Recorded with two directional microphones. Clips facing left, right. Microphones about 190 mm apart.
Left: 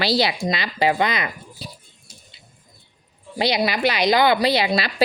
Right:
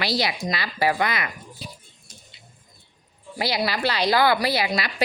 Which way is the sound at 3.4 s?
20° left (ahead or behind).